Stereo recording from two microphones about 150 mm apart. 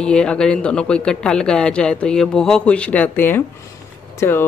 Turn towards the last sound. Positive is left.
turn(degrees=15)  # may be behind; listen again after turning